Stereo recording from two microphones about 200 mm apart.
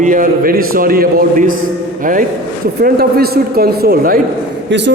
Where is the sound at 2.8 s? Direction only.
50° right (ahead or behind).